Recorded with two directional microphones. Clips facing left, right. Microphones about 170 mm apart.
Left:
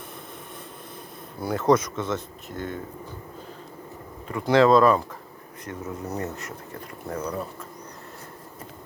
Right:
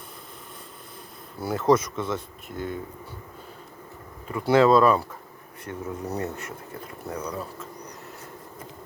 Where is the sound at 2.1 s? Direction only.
50° left (ahead or behind).